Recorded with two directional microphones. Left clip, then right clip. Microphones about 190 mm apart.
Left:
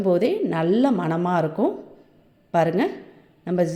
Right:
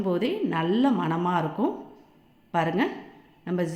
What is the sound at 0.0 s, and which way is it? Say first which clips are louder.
A woman's voice: left 6 dB; 20° left (ahead or behind).